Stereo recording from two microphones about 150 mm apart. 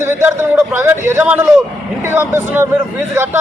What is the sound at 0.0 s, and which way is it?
A man's voice, 15° right (ahead or behind).